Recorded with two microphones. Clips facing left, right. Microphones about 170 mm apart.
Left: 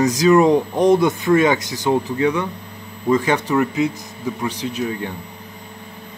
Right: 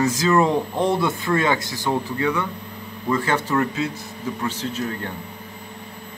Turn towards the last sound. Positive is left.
turn(degrees=15)  # may be behind; listen again after turning